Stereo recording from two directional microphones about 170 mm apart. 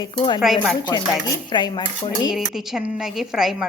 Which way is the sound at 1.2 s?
25° left (ahead or behind).